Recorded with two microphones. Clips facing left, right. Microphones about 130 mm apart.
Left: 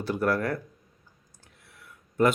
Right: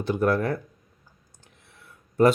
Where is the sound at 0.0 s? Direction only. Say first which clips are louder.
Right 3 dB; 20° right (ahead or behind).